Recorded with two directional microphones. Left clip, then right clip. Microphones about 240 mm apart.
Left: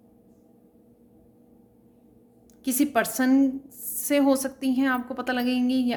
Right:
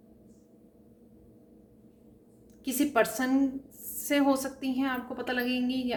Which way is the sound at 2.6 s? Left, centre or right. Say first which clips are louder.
Left 2 dB; left.